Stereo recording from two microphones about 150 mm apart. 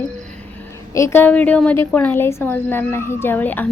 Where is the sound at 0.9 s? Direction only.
15° left (ahead or behind).